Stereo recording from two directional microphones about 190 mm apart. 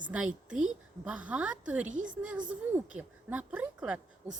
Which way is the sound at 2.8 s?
5° right (ahead or behind).